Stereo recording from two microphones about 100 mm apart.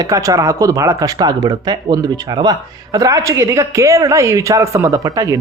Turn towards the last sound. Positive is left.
turn(degrees=-35)  # may be behind; listen again after turning